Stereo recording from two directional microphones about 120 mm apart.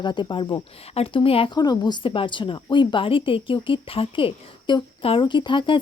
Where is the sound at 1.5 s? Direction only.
35° left (ahead or behind).